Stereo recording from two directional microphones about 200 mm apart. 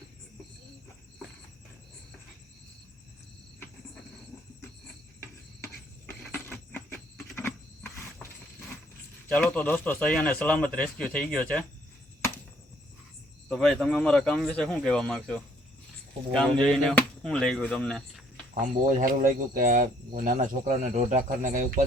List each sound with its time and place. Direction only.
5.2 s a sound: 10° left (ahead or behind)
9.3 s speech: 5° left (ahead or behind)
13.5 s speech: 5° left (ahead or behind)
18.6 s speech: 40° right (ahead or behind)